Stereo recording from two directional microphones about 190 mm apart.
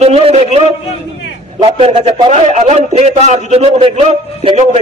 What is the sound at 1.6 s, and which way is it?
A man's voice, 25° right (ahead or behind).